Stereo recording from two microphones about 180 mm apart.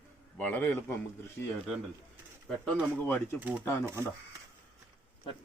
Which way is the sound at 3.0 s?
10° left (ahead or behind).